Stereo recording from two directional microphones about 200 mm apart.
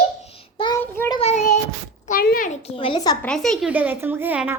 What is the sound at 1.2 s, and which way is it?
A child's voice, 35° left (ahead or behind).